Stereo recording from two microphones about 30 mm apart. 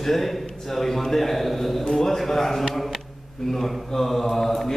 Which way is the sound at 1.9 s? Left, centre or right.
Centre.